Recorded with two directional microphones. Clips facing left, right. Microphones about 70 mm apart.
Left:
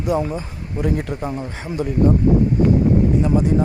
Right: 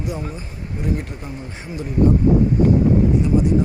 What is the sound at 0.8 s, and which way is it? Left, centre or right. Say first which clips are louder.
A man's voice: left 4 dB; left.